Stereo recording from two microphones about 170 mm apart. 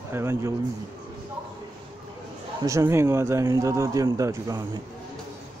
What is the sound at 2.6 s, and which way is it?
Speech, 20° right (ahead or behind).